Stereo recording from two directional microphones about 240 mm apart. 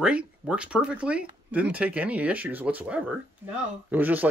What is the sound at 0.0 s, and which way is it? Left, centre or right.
Speech, centre.